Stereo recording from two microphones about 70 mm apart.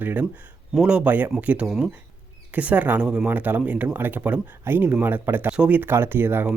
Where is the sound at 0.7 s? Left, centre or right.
Centre.